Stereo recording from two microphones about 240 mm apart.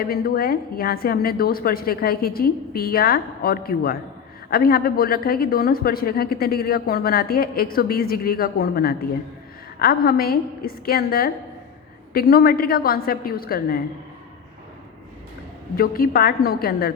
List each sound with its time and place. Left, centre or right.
0.0 s a woman's voice: left
15.7 s a woman's voice: left